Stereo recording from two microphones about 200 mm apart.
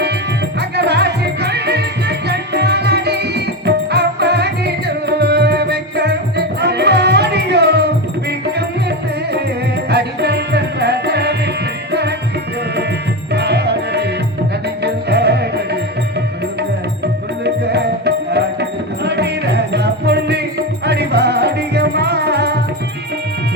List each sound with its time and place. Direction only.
0.8 s music: 55° right (ahead or behind)
9.9 s music: 55° right (ahead or behind)
13.3 s music: 55° right (ahead or behind)
17.4 s music: 55° right (ahead or behind)